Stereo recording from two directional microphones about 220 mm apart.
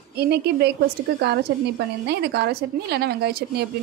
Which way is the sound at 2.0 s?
50° right (ahead or behind).